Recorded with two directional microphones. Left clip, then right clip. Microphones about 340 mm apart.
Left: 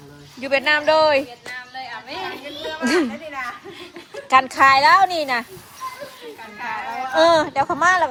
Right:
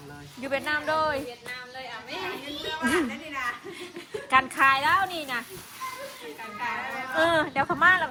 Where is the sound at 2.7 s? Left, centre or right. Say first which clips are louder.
Left 6 dB; centre.